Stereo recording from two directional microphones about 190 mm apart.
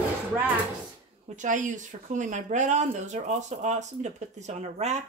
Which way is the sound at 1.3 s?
40° right (ahead or behind).